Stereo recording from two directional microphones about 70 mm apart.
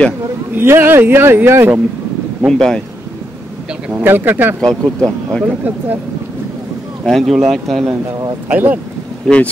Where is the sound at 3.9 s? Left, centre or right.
Right.